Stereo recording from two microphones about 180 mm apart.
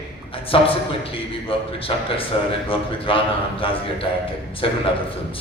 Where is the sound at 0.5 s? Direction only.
30° left (ahead or behind).